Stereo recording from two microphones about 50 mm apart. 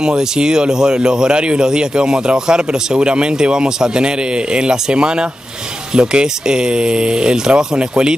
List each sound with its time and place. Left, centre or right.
0.0 s speech: centre